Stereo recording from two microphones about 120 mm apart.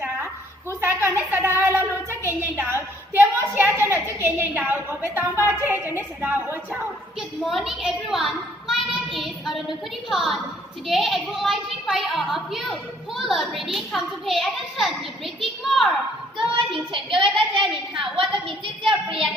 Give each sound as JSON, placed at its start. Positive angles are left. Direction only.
{"t": 0.8, "sound": "a sound", "side_deg": -20}
{"t": 2.0, "sound": "a woman's voice", "side_deg": -20}
{"t": 7.2, "sound": "a woman's voice", "side_deg": 0}
{"t": 15.4, "sound": "a sound", "side_deg": 0}
{"t": 16.4, "sound": "a child's voice", "side_deg": -45}
{"t": 17.3, "sound": "a woman's voice", "side_deg": 0}
{"t": 18.2, "sound": "a woman's voice", "side_deg": -45}